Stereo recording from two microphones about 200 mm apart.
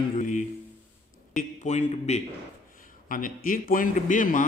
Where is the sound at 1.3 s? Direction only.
35° left (ahead or behind).